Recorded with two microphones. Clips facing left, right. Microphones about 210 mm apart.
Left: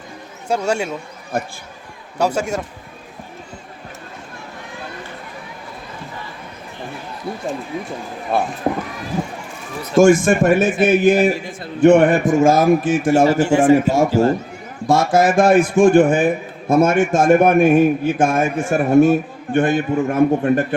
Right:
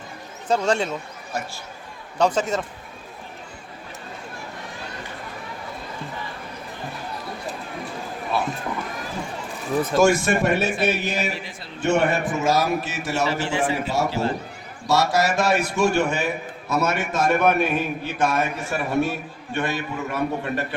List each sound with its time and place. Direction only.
0.4 s a man's voice: 10° left (ahead or behind)
1.3 s a man's voice: 55° left (ahead or behind)
2.1 s a man's voice: 10° left (ahead or behind)
8.3 s a man's voice: 50° left (ahead or behind)
9.9 s a man's voice: 50° left (ahead or behind)